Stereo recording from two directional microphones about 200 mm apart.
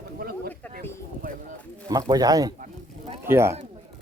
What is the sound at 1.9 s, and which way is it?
Speech, 20° right (ahead or behind).